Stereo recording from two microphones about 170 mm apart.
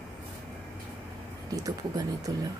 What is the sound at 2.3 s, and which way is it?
Speech, 20° right (ahead or behind).